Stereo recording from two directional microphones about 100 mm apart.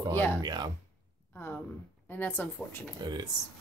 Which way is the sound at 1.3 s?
20° left (ahead or behind).